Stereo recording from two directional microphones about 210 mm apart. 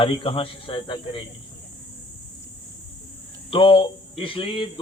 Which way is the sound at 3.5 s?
25° left (ahead or behind).